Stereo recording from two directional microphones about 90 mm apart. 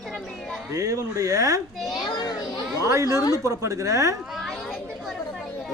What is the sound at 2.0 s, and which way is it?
Children playing, 50° left (ahead or behind).